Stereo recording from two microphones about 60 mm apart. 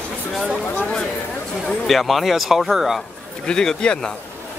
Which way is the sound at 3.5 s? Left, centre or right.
Centre.